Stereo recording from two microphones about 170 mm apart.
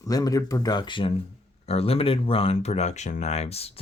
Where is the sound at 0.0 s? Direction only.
20° left (ahead or behind).